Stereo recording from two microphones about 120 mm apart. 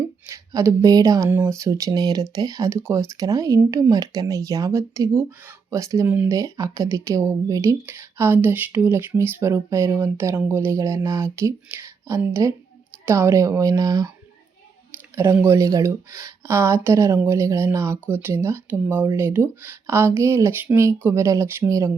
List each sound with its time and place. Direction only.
0.3 s speech: 25° right (ahead or behind)
6.1 s speech: 15° right (ahead or behind)
6.3 s speech: 25° right (ahead or behind)
7.9 s speech: 15° right (ahead or behind)
15.1 s speech: 20° right (ahead or behind)